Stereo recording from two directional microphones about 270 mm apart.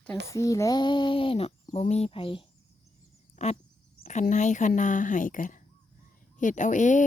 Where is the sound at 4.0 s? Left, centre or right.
Left.